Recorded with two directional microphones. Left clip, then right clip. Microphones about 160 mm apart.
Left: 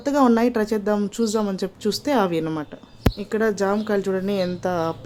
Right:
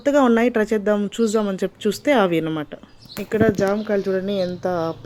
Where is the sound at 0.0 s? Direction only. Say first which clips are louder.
Right 2 dB; 10° right (ahead or behind).